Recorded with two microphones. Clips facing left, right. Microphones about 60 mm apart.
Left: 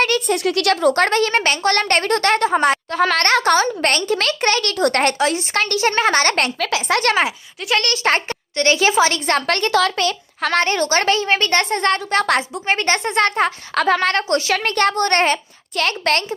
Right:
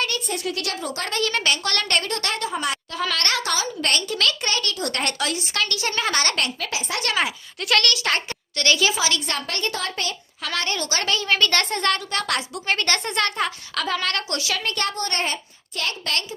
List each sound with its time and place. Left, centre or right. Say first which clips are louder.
0.3 s a woman's voice: left 10 dB; left
1.2 s speech: left 6 dB; left
5.1 s a woman's voice: left 7 dB; left
6.6 s speech: left 9 dB; left
7.0 s a woman's voice: left 6 dB; left
8.9 s a woman's voice: left 8 dB; left
10.4 s a woman's voice: left 9 dB; left